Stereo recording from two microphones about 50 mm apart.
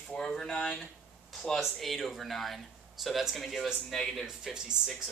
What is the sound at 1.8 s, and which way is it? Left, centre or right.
Speech, centre.